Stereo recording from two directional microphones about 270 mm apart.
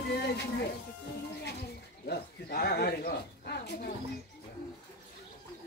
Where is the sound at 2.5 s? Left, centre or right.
Left.